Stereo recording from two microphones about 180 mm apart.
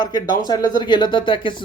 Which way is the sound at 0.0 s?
25° left (ahead or behind).